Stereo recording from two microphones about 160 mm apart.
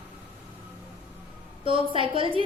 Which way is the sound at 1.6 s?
35° right (ahead or behind).